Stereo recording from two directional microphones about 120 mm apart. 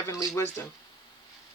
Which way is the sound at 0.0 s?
25° left (ahead or behind).